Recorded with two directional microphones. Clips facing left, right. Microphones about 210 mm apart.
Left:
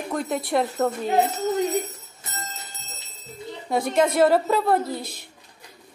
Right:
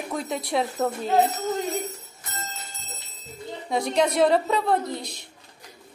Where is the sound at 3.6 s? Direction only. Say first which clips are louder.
Left 2 dB; centre (ahead or behind).